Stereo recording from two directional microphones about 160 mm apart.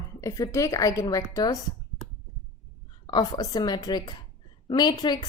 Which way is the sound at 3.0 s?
25° left (ahead or behind).